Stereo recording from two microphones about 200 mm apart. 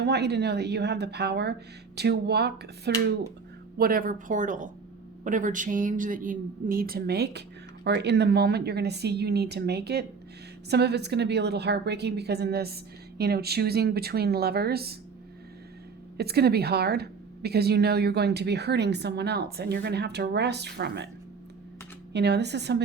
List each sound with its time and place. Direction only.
0.0 s a woman's voice: 55° right (ahead or behind)
16.1 s a woman's voice: 55° right (ahead or behind)
22.1 s a woman's voice: 55° right (ahead or behind)